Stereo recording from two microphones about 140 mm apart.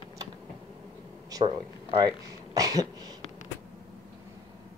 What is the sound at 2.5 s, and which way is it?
Throat clearing, 25° right (ahead or behind).